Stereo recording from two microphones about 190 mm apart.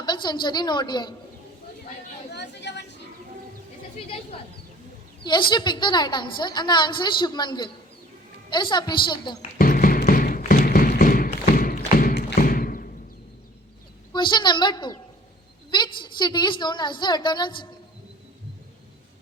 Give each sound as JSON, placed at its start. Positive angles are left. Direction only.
{"t": 0.0, "sound": "a woman's voice", "side_deg": 20}
{"t": 2.3, "sound": "a sound", "side_deg": 65}
{"t": 5.2, "sound": "a woman's voice", "side_deg": 25}
{"t": 9.6, "sound": "tap", "side_deg": 50}
{"t": 11.9, "sound": "thump", "side_deg": 55}
{"t": 14.1, "sound": "a woman's voice", "side_deg": 25}